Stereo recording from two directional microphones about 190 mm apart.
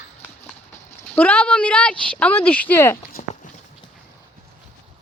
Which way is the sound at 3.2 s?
45° left (ahead or behind).